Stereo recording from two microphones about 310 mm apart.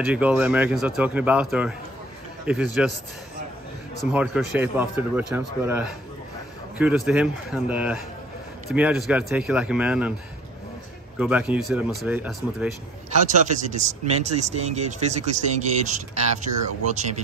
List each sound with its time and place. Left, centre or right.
0.0 s speech: centre
4.1 s speech: centre
11.1 s speech: centre
13.4 s speech: right